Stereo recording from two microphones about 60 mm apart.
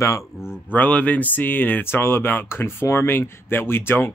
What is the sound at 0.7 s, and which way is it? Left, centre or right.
Speech, left.